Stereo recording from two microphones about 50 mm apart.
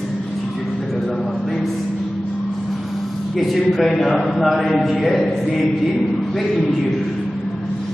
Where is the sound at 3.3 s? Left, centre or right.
Centre.